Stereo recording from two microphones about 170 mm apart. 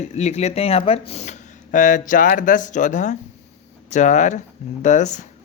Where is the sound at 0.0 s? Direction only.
40° left (ahead or behind).